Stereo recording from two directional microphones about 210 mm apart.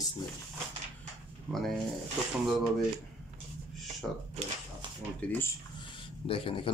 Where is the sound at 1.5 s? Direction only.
10° right (ahead or behind).